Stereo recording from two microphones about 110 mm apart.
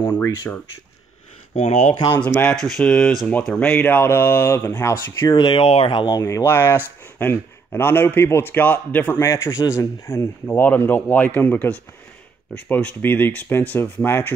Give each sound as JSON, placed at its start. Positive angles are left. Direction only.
{"t": 0.0, "sound": "speech", "side_deg": 15}
{"t": 1.5, "sound": "speech", "side_deg": 75}
{"t": 2.1, "sound": "speech", "side_deg": 15}
{"t": 2.5, "sound": "speech", "side_deg": 5}
{"t": 5.3, "sound": "speech", "side_deg": 45}
{"t": 5.7, "sound": "speech", "side_deg": 55}
{"t": 6.0, "sound": "speech", "side_deg": 30}
{"t": 9.2, "sound": "speech", "side_deg": 25}